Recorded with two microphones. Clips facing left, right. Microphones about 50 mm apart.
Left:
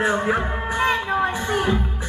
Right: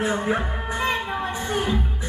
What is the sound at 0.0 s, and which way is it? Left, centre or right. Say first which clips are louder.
Music: left 3 dB; left.